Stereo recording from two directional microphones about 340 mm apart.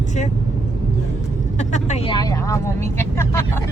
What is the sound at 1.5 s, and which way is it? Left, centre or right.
Speech, centre.